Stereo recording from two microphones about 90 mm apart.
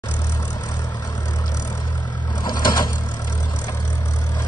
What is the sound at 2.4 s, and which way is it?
Vehicle, 50° left (ahead or behind).